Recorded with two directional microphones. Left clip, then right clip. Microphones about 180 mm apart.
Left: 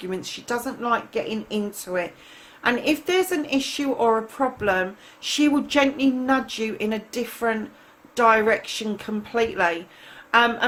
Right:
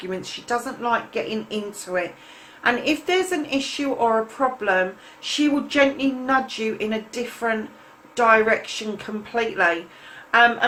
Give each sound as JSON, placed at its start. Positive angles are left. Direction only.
{"t": 0.1, "sound": "a woman's voice", "side_deg": 50}